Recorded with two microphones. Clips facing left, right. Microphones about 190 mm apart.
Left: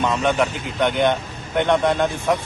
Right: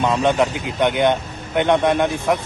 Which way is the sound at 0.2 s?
15° right (ahead or behind).